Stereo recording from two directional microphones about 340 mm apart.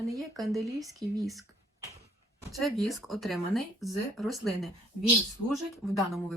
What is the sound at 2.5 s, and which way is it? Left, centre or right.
Speech, centre.